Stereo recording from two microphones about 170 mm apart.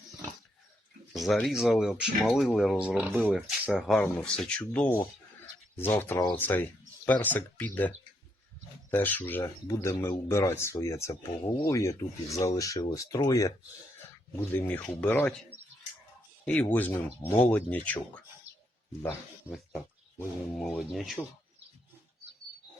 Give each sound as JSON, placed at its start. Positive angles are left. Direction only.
{"t": 1.1, "sound": "speech", "side_deg": 0}
{"t": 20.6, "sound": "speech", "side_deg": 0}